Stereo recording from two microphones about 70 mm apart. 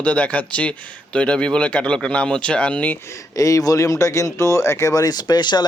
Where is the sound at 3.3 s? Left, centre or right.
Left.